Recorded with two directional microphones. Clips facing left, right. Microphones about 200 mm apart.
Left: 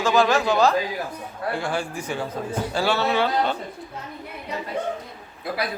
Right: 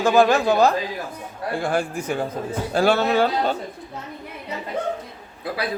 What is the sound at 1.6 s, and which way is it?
Speech, 55° right (ahead or behind).